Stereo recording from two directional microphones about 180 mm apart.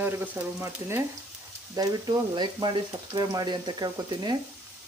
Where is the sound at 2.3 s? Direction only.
25° right (ahead or behind).